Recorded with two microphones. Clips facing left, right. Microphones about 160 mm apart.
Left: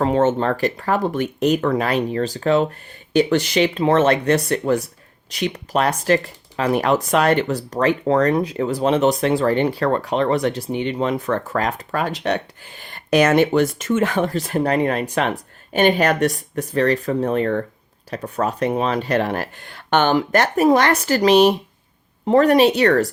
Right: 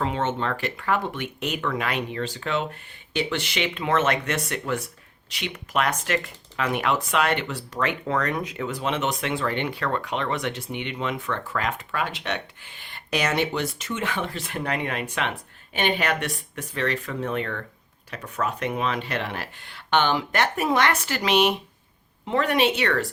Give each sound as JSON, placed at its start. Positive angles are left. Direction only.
{"t": 0.0, "sound": "speech", "side_deg": 40}